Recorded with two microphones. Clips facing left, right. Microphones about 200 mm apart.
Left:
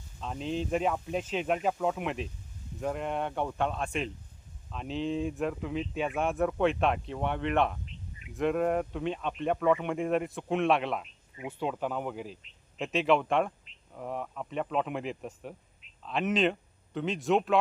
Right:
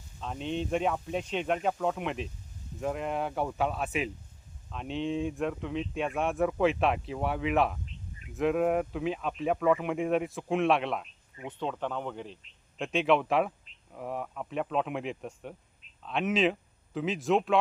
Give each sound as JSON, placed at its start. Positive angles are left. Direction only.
{"t": 0.2, "sound": "speech", "side_deg": 0}